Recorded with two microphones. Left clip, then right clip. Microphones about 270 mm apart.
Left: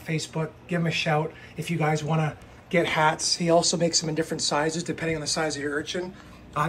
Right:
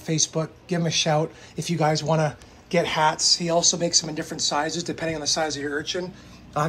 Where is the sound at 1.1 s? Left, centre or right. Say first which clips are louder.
Right 2 dB; right.